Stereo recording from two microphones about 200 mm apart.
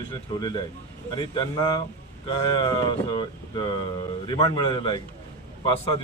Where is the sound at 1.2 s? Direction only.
25° left (ahead or behind).